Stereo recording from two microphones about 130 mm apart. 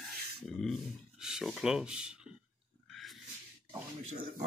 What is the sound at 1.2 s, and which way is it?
Speech, 5° right (ahead or behind).